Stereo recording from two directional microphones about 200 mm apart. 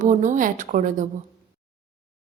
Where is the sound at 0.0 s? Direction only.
40° right (ahead or behind).